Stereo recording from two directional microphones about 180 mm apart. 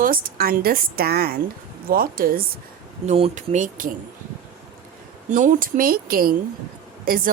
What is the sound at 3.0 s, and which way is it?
Speech, 35° right (ahead or behind).